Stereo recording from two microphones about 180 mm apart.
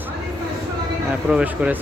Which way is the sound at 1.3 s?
5° right (ahead or behind).